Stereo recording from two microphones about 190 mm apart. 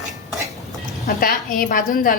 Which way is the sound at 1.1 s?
50° left (ahead or behind).